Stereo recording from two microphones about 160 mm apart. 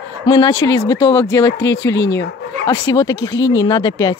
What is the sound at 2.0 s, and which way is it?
Speech, 90° left.